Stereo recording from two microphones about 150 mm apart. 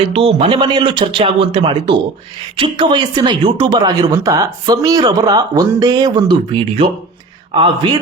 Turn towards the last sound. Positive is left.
turn(degrees=-35)  # may be behind; listen again after turning